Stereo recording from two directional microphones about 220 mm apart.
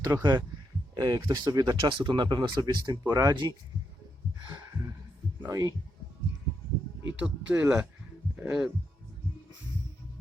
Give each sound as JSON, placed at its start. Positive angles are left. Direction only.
{"t": 0.0, "sound": "speech", "side_deg": -15}
{"t": 5.4, "sound": "speech", "side_deg": -15}
{"t": 7.2, "sound": "speech", "side_deg": -5}